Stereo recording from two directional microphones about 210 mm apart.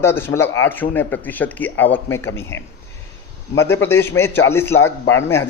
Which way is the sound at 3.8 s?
10° left (ahead or behind).